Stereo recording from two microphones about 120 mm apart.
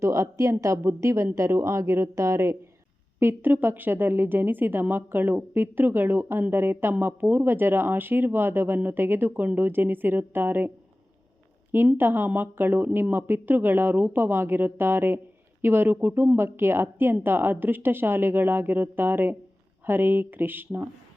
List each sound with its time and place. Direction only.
0.0 s a woman's voice: 25° right (ahead or behind)
11.7 s a woman's voice: 20° right (ahead or behind)